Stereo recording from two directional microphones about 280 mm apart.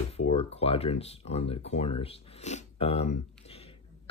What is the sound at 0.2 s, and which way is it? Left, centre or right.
Speech, left.